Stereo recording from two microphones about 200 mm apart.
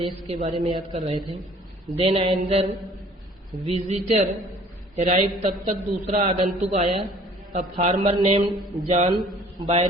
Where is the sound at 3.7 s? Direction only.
35° right (ahead or behind).